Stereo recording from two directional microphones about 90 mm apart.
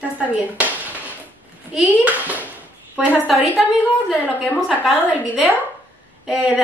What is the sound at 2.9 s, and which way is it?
Speech, 15° right (ahead or behind).